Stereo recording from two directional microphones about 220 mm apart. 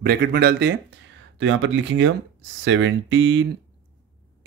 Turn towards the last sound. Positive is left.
turn(degrees=-55)  # may be behind; listen again after turning